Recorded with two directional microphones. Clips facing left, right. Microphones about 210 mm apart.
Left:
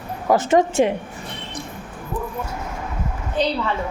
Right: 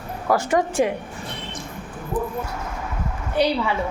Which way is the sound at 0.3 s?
20° left (ahead or behind).